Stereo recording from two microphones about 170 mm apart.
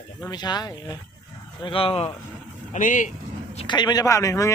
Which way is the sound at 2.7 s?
50° left (ahead or behind).